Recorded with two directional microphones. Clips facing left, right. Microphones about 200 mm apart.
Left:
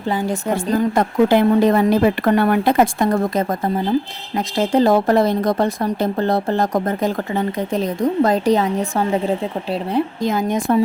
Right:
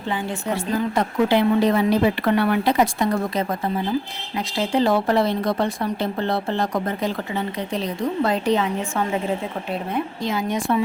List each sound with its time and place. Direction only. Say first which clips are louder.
0.1 s speech: left 5 dB; 40° left (ahead or behind)
10.2 s speech: left 2 dB; 45° left (ahead or behind)